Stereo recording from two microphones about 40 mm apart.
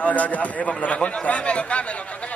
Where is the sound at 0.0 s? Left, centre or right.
Left.